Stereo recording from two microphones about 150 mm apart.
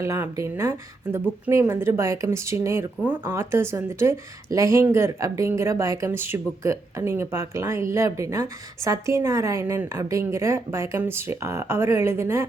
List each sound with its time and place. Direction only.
0.0 s speech: 20° right (ahead or behind)